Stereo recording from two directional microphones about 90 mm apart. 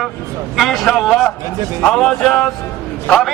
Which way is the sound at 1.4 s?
40° right (ahead or behind).